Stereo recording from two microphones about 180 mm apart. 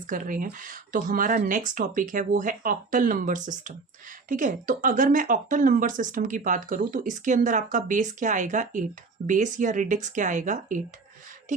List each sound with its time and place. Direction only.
0.1 s speech: 50° right (ahead or behind)